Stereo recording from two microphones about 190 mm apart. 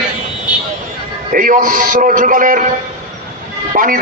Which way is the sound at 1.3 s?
45° right (ahead or behind).